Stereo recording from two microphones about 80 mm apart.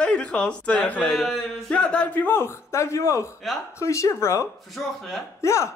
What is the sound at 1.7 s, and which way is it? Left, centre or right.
Speech, centre.